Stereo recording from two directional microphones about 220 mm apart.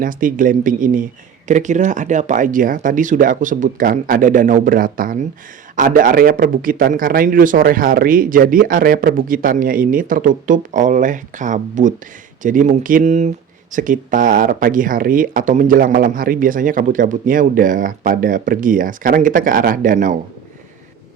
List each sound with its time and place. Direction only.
0.0 s speech: 40° right (ahead or behind)